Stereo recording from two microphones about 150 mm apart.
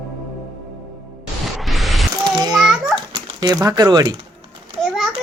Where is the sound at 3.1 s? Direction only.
30° right (ahead or behind).